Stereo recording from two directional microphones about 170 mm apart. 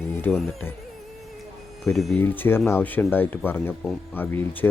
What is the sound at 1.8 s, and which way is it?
Speech, centre (ahead or behind).